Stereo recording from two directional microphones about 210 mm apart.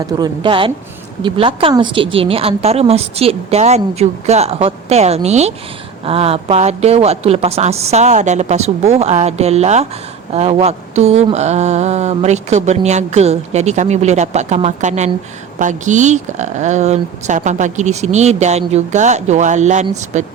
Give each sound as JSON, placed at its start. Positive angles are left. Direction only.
{"t": 0.1, "sound": "speech", "side_deg": -20}
{"t": 6.1, "sound": "mantra", "side_deg": -30}